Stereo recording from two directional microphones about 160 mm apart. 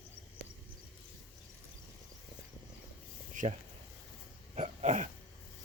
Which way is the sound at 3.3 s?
50° right (ahead or behind).